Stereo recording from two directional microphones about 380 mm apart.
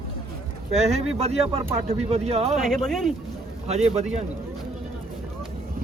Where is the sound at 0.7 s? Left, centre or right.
Centre.